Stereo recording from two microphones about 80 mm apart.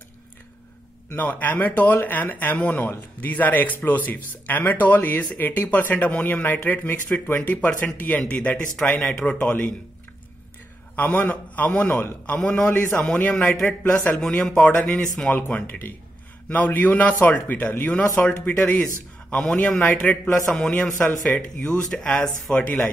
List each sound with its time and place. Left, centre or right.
1.0 s speech: left
11.0 s speech: left
19.8 s speech: centre